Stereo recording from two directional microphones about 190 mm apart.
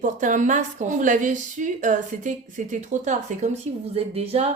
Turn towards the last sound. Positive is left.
turn(degrees=-30)  # may be behind; listen again after turning